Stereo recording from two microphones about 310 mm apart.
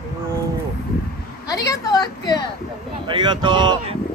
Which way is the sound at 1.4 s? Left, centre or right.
Centre.